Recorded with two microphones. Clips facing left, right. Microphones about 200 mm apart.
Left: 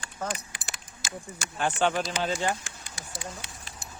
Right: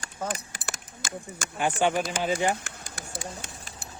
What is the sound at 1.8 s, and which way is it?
Speech, 10° right (ahead or behind).